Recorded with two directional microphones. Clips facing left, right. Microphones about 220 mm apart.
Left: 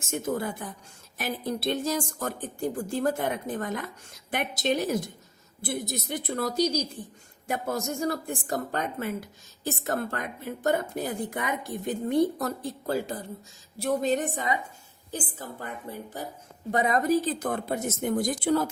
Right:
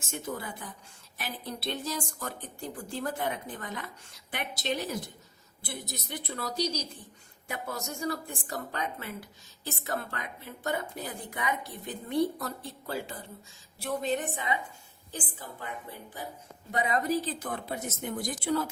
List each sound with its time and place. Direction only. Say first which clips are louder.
0.1 s a woman's voice: left 7 dB; 45° left (ahead or behind)